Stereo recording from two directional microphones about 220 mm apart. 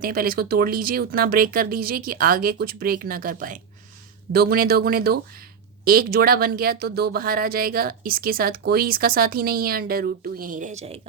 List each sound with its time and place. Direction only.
0.0 s speech: 40° right (ahead or behind)